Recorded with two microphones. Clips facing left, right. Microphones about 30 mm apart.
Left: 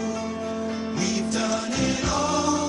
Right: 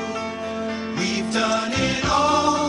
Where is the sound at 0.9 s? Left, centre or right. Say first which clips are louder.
Right 3 dB; right.